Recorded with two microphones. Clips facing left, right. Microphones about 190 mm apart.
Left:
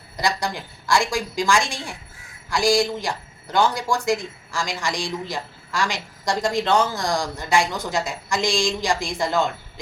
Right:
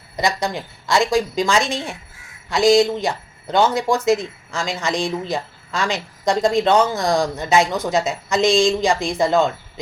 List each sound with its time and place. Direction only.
0.2 s speech: 20° right (ahead or behind)